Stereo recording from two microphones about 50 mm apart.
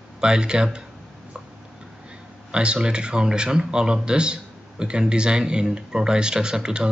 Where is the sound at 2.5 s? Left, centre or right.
Centre.